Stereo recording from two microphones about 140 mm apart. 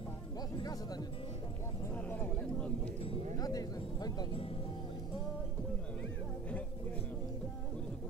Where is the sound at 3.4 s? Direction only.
25° left (ahead or behind).